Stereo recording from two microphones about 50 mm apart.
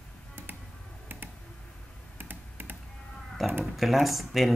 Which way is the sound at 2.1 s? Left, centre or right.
Right.